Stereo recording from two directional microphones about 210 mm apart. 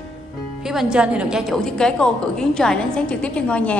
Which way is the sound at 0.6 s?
5° right (ahead or behind).